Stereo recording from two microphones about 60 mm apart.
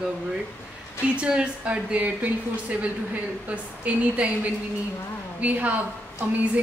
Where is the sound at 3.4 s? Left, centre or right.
Right.